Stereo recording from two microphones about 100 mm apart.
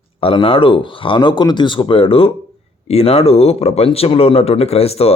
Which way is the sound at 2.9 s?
80° left.